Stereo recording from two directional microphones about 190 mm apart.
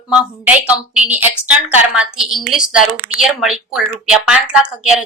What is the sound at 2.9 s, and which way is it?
Speech, 35° right (ahead or behind).